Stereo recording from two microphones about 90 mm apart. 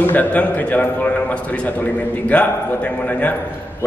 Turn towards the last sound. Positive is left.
turn(degrees=15)  # may be behind; listen again after turning